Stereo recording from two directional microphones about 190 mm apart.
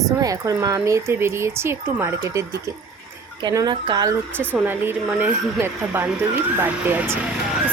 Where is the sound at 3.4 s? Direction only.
20° right (ahead or behind).